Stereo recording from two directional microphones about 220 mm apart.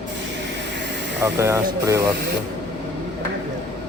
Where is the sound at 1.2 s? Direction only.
10° right (ahead or behind).